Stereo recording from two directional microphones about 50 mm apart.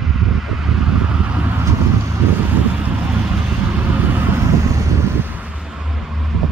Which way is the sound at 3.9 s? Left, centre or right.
Right.